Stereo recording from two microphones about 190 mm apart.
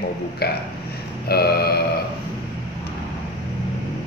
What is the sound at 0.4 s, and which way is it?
A man's voice, 55° left (ahead or behind).